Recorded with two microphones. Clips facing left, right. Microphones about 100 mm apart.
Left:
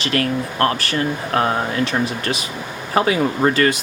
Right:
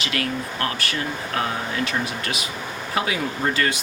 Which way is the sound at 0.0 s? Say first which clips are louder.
Left 6 dB; 45° left (ahead or behind).